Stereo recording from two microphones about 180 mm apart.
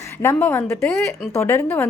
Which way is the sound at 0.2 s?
10° left (ahead or behind).